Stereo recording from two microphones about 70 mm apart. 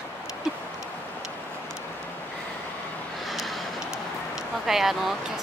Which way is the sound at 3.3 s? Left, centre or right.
Centre.